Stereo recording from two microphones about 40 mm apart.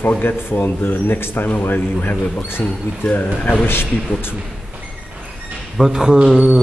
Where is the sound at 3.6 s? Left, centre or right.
Left.